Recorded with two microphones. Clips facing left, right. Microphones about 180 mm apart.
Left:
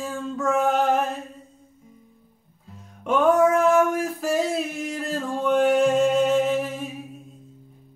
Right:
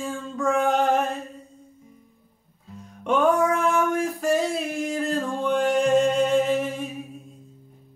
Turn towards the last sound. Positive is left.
turn(degrees=0)  # may be behind; listen again after turning